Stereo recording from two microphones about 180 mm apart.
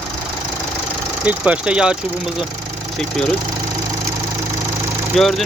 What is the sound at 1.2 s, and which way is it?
Speech, 5° right (ahead or behind).